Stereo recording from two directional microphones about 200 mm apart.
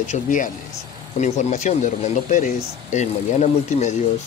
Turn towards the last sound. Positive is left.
turn(degrees=35)  # may be behind; listen again after turning